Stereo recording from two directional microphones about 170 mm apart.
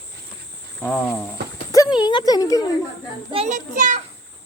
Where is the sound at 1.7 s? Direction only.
25° left (ahead or behind).